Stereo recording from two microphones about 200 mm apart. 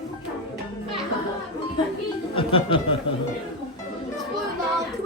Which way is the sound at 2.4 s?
25° left (ahead or behind).